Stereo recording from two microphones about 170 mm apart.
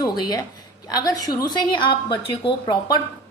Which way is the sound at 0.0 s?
20° left (ahead or behind).